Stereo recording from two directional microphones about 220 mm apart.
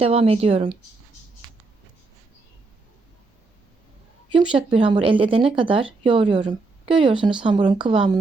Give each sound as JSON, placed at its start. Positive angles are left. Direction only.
{"t": 0.0, "sound": "speech", "side_deg": -25}
{"t": 4.5, "sound": "speech", "side_deg": -25}